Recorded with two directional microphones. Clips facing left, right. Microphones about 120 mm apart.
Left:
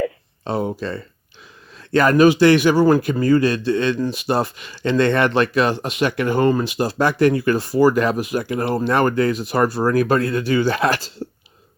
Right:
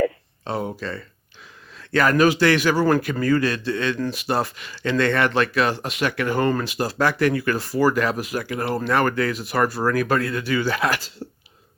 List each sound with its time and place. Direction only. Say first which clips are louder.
0.4 s speech: left 4 dB; 25° left (ahead or behind)